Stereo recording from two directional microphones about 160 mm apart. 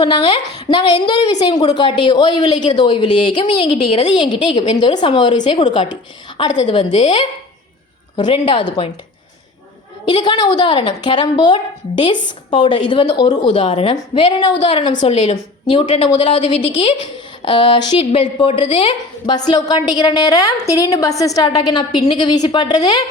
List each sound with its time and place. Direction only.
0.0 s a woman's voice: 35° left (ahead or behind)
10.1 s a woman's voice: 25° left (ahead or behind)
17.4 s a woman's voice: 30° left (ahead or behind)